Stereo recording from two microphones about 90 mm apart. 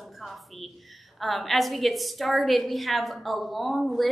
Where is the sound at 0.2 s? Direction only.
Centre (ahead or behind).